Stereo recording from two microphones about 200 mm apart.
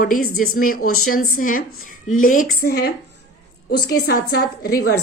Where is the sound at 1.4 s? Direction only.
45° left (ahead or behind).